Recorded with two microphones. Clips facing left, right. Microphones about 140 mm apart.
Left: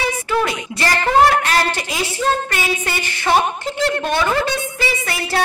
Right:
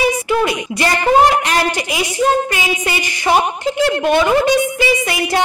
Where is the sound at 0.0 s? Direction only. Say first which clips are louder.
Right 4 dB; 15° right (ahead or behind).